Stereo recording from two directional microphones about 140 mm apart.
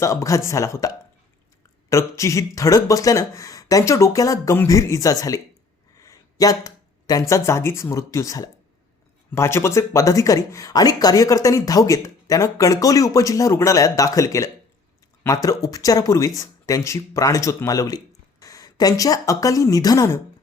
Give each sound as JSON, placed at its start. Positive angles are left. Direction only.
{"t": 0.0, "sound": "speech", "side_deg": 20}